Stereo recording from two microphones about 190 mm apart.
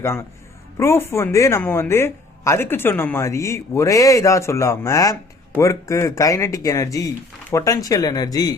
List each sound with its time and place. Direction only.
0.0 s speech: 15° left (ahead or behind)